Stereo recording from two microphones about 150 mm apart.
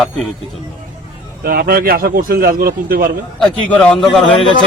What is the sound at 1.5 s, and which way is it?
A man's voice, 90° right.